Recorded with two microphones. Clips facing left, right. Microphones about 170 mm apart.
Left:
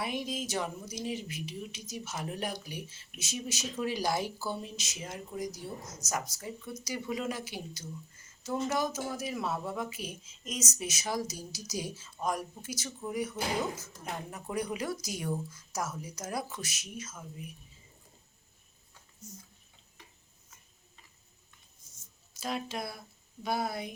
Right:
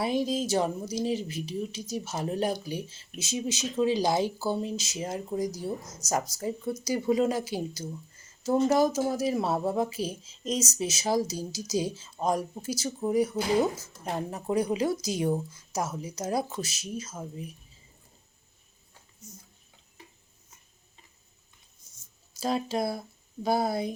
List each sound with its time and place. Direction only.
0.0 s speech: 35° right (ahead or behind)
6.0 s speech: 10° right (ahead or behind)
6.4 s speech: 35° right (ahead or behind)
21.8 s a sound: 60° right (ahead or behind)
22.4 s speech: 35° right (ahead or behind)